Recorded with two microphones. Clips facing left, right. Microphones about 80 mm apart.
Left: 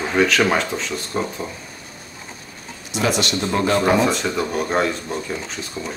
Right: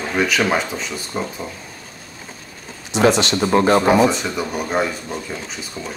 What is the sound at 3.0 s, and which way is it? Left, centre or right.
Speech, right.